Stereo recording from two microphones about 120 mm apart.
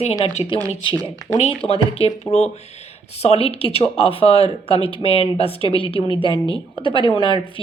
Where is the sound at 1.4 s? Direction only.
55° left (ahead or behind).